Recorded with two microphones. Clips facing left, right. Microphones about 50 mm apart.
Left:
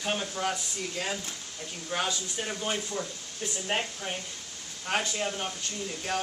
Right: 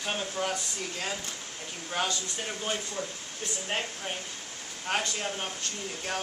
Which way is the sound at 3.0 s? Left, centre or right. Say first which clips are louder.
Even; right.